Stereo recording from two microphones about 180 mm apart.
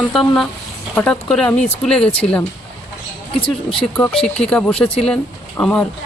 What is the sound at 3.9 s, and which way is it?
Speech, 5° left (ahead or behind).